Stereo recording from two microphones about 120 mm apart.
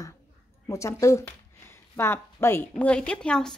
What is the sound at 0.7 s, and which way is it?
A woman's voice, 25° left (ahead or behind).